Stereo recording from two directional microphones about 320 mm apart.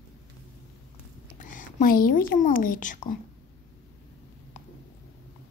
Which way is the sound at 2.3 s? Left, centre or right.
Left.